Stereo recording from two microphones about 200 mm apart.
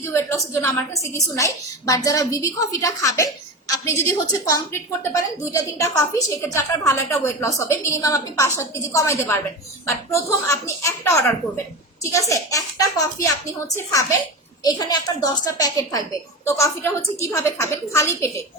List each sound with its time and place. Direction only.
0.0 s a woman's voice: 15° left (ahead or behind)